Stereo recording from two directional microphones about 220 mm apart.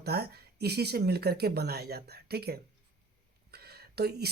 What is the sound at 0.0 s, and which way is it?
Speech, 45° right (ahead or behind).